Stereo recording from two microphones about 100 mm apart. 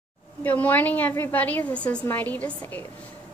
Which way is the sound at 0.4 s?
15° left (ahead or behind).